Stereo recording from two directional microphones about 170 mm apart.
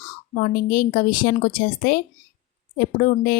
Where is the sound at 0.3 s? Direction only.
55° left (ahead or behind).